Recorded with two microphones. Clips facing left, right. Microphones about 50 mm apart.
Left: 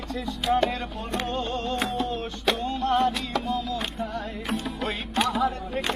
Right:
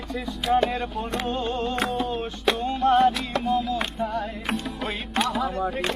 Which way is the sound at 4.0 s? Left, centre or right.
Centre.